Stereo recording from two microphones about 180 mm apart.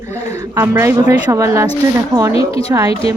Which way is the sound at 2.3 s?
30° left (ahead or behind).